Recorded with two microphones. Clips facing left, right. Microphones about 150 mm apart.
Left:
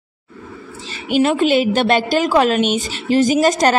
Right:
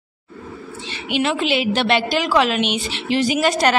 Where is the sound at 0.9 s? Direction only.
40° left (ahead or behind).